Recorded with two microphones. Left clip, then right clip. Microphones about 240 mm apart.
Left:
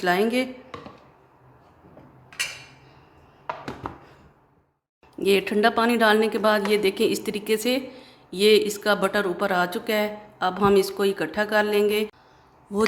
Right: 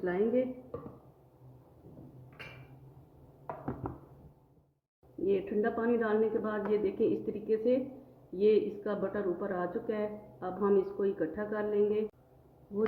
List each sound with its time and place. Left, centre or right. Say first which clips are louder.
0.0 s speech: left 8 dB; left
5.2 s a woman's voice: left 11 dB; left